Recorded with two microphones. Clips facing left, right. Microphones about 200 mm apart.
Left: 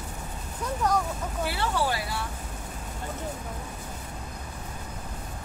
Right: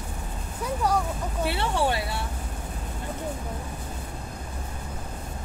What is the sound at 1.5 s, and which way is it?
Speech, 25° right (ahead or behind).